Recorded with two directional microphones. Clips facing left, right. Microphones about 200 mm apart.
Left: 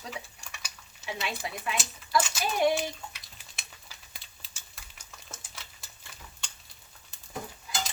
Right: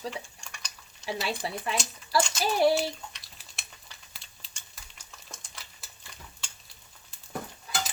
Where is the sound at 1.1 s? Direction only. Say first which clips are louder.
Right 4 dB; 35° right (ahead or behind).